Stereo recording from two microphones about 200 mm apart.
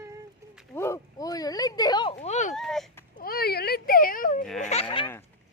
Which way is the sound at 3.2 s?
50° left (ahead or behind).